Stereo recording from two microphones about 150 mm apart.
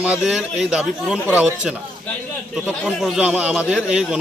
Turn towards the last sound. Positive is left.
turn(degrees=-5)  # may be behind; listen again after turning